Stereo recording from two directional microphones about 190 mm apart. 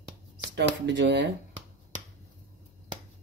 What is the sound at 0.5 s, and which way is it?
Speech, 65° right (ahead or behind).